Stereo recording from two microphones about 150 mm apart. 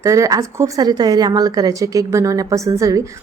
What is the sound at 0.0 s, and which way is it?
Speech, 20° right (ahead or behind).